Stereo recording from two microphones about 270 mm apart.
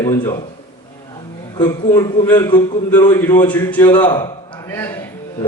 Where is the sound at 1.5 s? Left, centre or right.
Centre.